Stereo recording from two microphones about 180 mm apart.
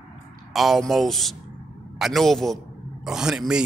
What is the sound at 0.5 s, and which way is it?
Speech, centre (ahead or behind).